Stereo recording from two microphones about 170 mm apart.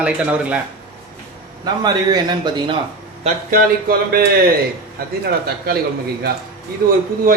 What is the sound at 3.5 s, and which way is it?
Speech, 60° right (ahead or behind).